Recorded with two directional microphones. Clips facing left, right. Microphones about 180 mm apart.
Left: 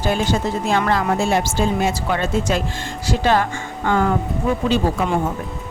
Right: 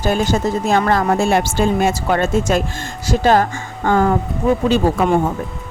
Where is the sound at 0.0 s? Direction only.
45° right (ahead or behind).